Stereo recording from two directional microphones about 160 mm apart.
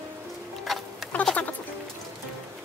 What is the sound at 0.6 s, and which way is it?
Insect, 5° left (ahead or behind).